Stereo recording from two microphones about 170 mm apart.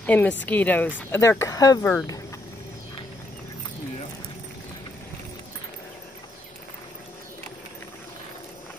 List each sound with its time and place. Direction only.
0.0 s speech: 10° left (ahead or behind)